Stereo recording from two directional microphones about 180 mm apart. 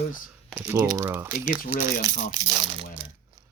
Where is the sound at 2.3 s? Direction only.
25° right (ahead or behind).